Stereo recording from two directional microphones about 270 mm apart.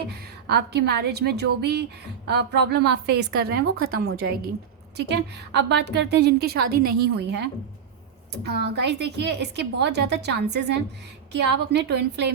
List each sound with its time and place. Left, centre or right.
0.1 s a woman's voice: right